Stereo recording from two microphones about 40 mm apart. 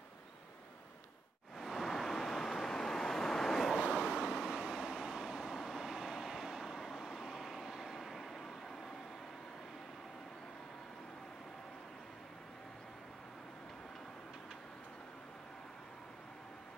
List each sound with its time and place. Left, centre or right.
1.6 s a sound: centre
1.9 s vehicle: centre
3.8 s vehicle: centre